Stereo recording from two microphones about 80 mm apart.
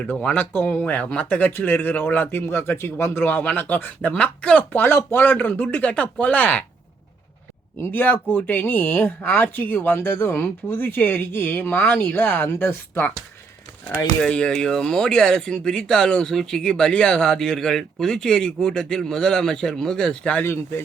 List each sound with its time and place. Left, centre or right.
0.1 s speech: centre
4.8 s speech: left
7.8 s speech: left
14.2 s speech: centre
20.4 s speech: left